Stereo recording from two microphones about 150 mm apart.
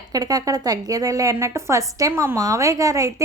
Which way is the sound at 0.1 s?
25° right (ahead or behind).